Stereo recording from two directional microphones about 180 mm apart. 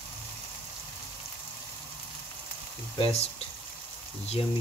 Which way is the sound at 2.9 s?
35° left (ahead or behind).